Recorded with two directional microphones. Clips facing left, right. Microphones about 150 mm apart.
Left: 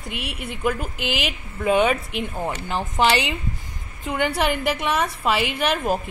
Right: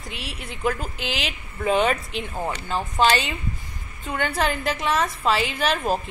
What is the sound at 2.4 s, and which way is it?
A woman's voice, 15° left (ahead or behind).